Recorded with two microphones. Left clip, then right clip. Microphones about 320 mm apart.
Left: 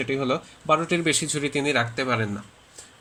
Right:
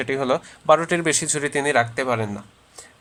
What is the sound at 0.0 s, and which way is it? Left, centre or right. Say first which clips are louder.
Speech: right 3 dB; right.